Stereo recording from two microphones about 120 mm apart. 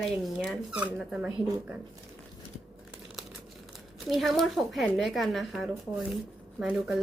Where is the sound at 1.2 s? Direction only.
10° right (ahead or behind).